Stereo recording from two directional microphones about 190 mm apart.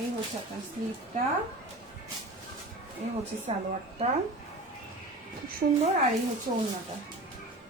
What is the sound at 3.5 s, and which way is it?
Speech, 30° right (ahead or behind).